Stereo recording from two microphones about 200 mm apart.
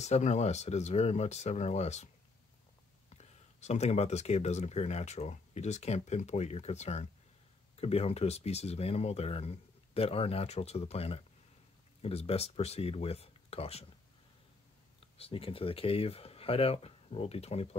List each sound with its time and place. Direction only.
0.0 s speech: 35° left (ahead or behind)
3.1 s speech: 35° left (ahead or behind)
15.1 s speech: 30° left (ahead or behind)